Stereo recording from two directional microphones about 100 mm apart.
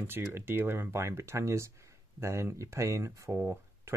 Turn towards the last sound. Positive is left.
turn(degrees=-25)  # may be behind; listen again after turning